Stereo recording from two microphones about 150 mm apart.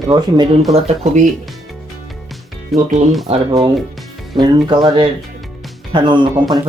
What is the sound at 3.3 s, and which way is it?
Speech, 40° right (ahead or behind).